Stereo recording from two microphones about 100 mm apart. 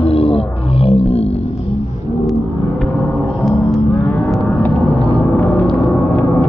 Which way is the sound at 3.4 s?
Centre (ahead or behind).